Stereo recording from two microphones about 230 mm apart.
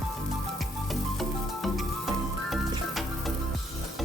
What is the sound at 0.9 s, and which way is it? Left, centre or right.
Music, centre.